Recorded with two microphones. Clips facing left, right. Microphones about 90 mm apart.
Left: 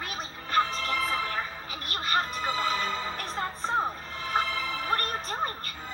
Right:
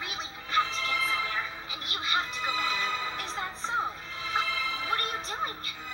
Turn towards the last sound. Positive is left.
turn(degrees=45)  # may be behind; listen again after turning